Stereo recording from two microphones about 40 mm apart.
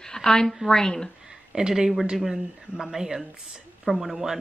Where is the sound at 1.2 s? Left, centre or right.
Centre.